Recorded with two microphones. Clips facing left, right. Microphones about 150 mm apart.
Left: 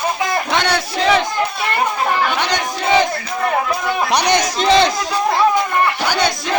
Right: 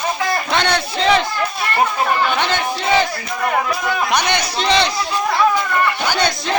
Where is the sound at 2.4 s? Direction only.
15° left (ahead or behind).